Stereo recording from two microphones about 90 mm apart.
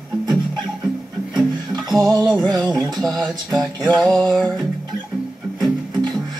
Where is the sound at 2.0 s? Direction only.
50° right (ahead or behind).